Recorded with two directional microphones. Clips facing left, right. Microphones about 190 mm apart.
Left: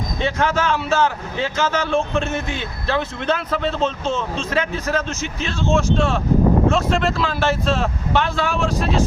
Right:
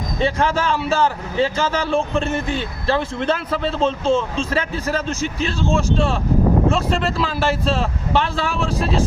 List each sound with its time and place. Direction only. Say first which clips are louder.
0.2 s a man's voice: right 1 dB; 35° right (ahead or behind)
3.5 s a man's voice: even; 5° right (ahead or behind)
3.8 s a man's voice: right 4 dB; 30° right (ahead or behind)
7.2 s a man's voice: even; 5° right (ahead or behind)
7.4 s a man's voice: left 1 dB; 35° right (ahead or behind)